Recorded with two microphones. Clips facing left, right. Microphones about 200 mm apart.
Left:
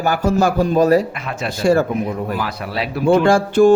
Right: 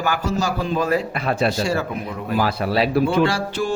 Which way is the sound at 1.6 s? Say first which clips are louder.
Left 7 dB; 50° left (ahead or behind).